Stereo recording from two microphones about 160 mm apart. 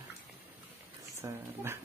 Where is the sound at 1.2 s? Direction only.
15° right (ahead or behind).